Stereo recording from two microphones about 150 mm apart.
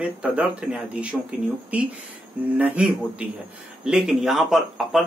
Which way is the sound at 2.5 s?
10° right (ahead or behind).